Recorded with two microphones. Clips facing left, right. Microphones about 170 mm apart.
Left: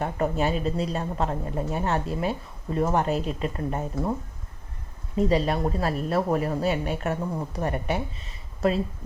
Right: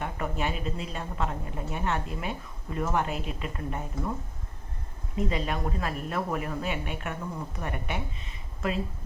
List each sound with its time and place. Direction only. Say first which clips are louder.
0.0 s speech: left 6 dB; 35° left (ahead or behind)
5.1 s speech: left 7 dB; 35° left (ahead or behind)